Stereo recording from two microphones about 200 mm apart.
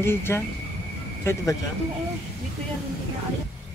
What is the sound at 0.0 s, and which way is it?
A man's voice, 10° left (ahead or behind).